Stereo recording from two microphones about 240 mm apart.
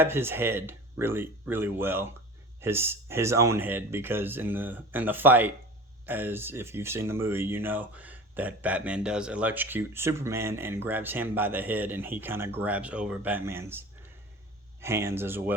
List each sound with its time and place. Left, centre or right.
0.0 s speech: centre